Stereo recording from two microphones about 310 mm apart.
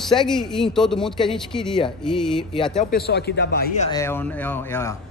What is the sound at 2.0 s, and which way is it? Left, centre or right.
Speech, centre.